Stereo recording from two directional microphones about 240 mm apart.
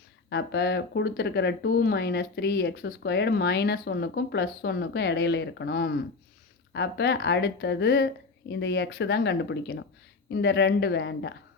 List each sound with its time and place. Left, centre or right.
0.3 s speech: left